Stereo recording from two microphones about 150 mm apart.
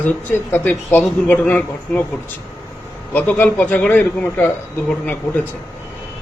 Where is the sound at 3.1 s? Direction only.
10° left (ahead or behind).